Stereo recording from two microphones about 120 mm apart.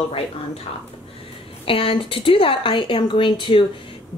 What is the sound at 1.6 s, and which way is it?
A woman's voice, 50° left (ahead or behind).